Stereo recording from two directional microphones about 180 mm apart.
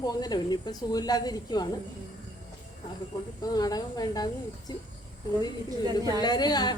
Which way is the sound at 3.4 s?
20° left (ahead or behind).